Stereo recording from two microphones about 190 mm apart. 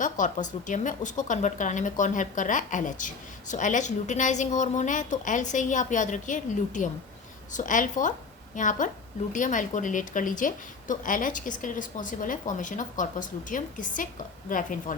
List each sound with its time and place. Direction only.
0.0 s a woman's voice: 40° left (ahead or behind)